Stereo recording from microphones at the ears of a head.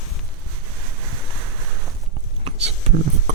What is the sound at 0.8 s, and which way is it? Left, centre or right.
Boat, right.